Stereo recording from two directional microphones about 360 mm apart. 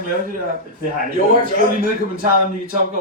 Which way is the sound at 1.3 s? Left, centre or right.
Right.